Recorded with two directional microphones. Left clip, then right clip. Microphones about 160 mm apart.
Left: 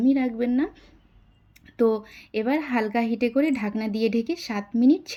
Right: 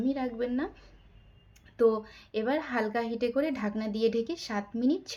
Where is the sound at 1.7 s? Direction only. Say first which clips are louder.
Left 3 dB; 30° left (ahead or behind).